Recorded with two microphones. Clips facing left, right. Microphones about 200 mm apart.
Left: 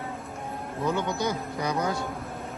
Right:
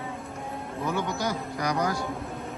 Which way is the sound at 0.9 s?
20° left (ahead or behind).